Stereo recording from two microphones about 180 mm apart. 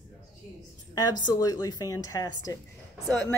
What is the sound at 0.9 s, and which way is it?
A woman's voice, 20° left (ahead or behind).